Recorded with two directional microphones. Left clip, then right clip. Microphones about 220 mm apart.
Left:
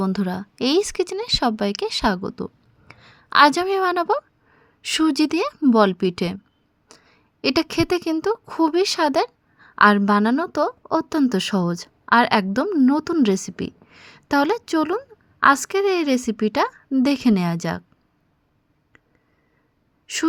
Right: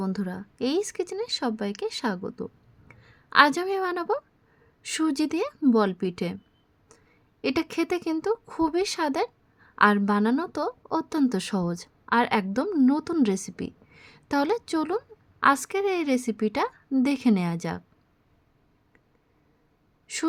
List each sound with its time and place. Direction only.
0.0 s a woman's voice: 25° left (ahead or behind)
20.1 s a woman's voice: 20° left (ahead or behind)